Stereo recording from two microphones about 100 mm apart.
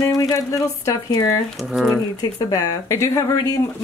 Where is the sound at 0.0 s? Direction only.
35° left (ahead or behind).